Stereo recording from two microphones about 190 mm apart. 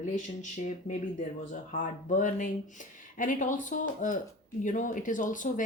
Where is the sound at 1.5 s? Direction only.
45° left (ahead or behind).